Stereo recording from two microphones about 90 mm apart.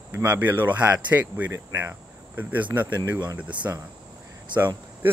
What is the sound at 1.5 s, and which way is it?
Speech, 30° right (ahead or behind).